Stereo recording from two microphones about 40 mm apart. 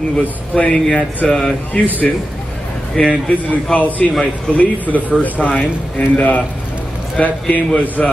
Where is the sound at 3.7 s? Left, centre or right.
Left.